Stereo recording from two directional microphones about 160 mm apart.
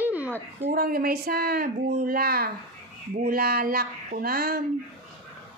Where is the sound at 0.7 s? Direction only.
70° right (ahead or behind).